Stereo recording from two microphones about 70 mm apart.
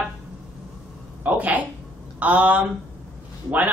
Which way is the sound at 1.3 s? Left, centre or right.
Right.